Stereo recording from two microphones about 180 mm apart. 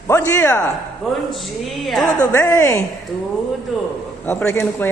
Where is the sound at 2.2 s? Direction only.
15° left (ahead or behind).